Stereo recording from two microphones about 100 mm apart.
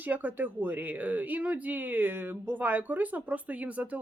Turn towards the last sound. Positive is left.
turn(degrees=-15)  # may be behind; listen again after turning